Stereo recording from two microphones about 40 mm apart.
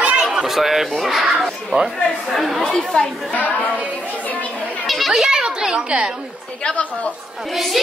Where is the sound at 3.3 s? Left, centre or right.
Left.